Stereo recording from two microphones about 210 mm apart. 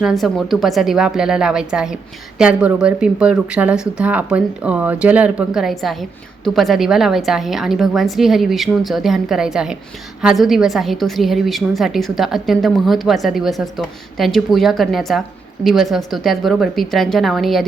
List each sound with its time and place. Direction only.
0.0 s speech: centre (ahead or behind)